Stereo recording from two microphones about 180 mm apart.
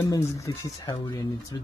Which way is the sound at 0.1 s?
20° left (ahead or behind).